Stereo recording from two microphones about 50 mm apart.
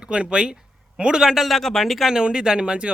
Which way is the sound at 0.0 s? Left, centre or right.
Centre.